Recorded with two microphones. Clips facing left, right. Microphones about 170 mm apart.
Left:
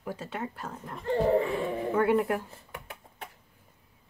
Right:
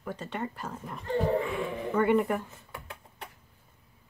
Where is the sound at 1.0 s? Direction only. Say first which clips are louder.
Left 3 dB; 30° left (ahead or behind).